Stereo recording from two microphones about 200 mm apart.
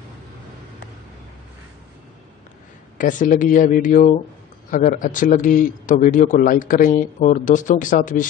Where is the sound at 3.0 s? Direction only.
40° left (ahead or behind).